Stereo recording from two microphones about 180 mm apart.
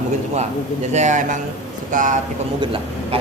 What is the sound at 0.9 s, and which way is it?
Speech, 40° right (ahead or behind).